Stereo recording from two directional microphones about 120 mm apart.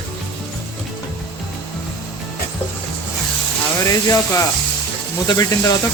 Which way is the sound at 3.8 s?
30° left (ahead or behind).